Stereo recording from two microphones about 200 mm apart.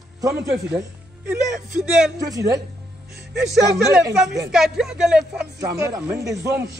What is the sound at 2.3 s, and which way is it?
Speech, 15° right (ahead or behind).